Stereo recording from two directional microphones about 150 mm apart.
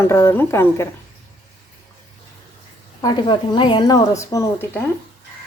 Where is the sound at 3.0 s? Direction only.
30° left (ahead or behind).